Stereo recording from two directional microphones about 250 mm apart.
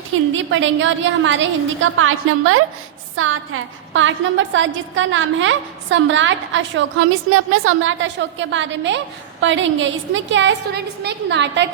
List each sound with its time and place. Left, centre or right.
0.1 s a woman's voice: right